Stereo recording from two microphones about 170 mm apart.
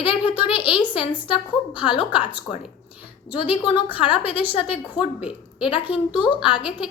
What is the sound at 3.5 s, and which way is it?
A woman's voice, 30° left (ahead or behind).